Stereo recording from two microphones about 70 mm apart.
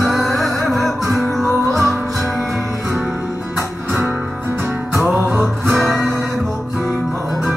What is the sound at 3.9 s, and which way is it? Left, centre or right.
Music, right.